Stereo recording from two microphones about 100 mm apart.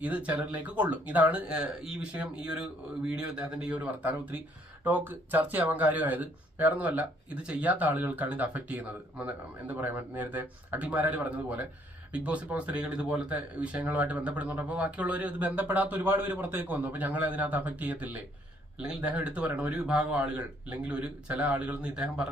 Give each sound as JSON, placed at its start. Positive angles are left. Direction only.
{"t": 0.0, "sound": "speech", "side_deg": -15}